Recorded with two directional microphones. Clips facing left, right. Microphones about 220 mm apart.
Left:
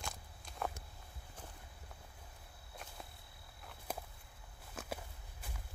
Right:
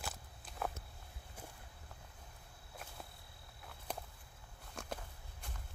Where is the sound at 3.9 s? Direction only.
5° left (ahead or behind).